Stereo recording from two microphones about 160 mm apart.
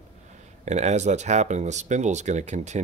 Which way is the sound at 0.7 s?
45° right (ahead or behind).